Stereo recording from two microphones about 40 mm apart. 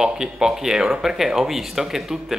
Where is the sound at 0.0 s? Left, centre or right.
Centre.